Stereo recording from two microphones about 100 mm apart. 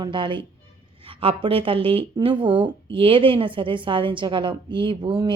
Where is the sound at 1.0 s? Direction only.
65° right (ahead or behind).